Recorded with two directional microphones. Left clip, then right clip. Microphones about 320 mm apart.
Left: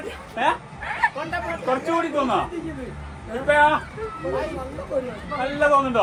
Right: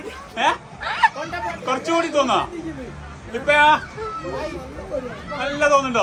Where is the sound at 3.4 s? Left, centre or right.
Centre.